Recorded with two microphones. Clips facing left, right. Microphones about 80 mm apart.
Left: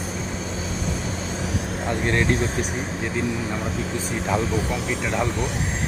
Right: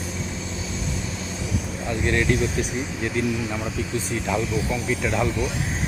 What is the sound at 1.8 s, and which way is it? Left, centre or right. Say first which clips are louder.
Speech: even; left.